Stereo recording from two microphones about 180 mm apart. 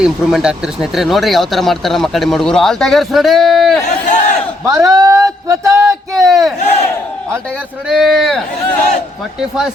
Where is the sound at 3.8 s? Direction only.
45° left (ahead or behind).